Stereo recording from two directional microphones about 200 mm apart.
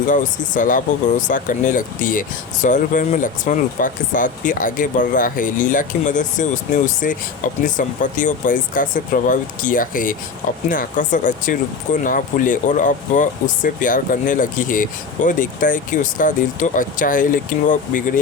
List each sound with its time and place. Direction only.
0.5 s speech: 40° left (ahead or behind)